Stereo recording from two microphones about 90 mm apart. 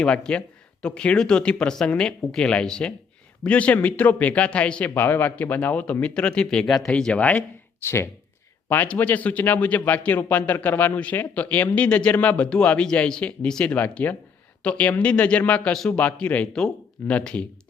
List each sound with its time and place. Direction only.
0.0 s speech: 10° left (ahead or behind)
7.8 s speech: 25° left (ahead or behind)